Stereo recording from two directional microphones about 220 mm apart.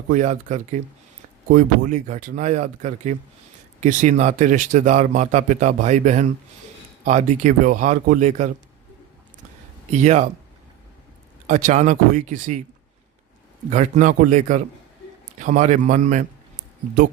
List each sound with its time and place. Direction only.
0.1 s speech: 35° right (ahead or behind)
9.9 s speech: 35° right (ahead or behind)
11.4 s speech: 35° right (ahead or behind)
13.7 s speech: 35° right (ahead or behind)